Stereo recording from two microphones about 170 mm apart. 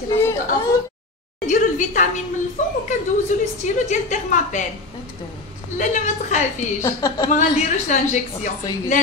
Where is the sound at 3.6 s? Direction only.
45° left (ahead or behind).